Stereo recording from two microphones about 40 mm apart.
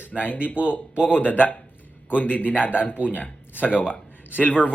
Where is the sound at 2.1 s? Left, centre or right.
Left.